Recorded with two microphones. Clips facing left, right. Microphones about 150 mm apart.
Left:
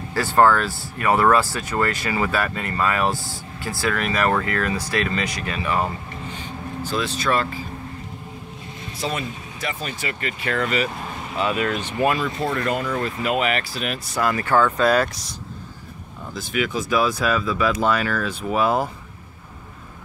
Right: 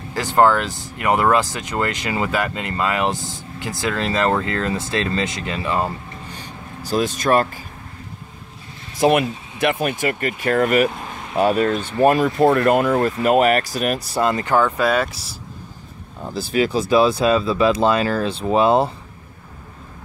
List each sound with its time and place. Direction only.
0.1 s speech: 20° right (ahead or behind)
6.8 s speech: 45° right (ahead or behind)
9.0 s speech: 60° right (ahead or behind); by 14.0 s 40° right (ahead or behind)
14.1 s speech: 20° right (ahead or behind)
14.8 s speech: centre (ahead or behind)
16.3 s speech: 35° right (ahead or behind)